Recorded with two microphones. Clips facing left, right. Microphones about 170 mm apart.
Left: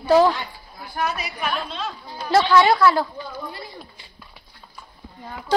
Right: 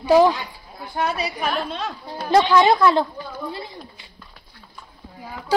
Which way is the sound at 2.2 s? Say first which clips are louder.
Right 1 dB; 15° right (ahead or behind).